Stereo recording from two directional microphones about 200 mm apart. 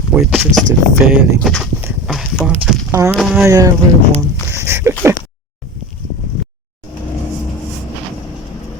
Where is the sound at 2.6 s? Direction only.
15° right (ahead or behind).